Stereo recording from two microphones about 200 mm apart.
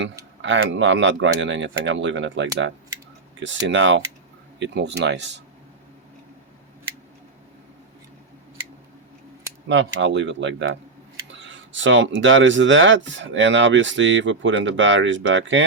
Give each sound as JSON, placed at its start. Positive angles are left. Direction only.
{"t": 0.4, "sound": "speech", "side_deg": -65}
{"t": 9.6, "sound": "speech", "side_deg": -65}